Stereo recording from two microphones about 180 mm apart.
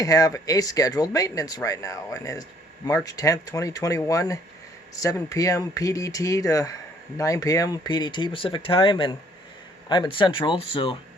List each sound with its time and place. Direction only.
0.0 s speech: 20° left (ahead or behind)